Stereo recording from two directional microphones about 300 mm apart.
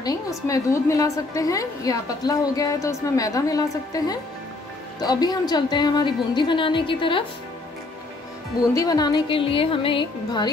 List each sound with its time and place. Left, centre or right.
0.0 s a woman's voice: centre
8.7 s a woman's voice: centre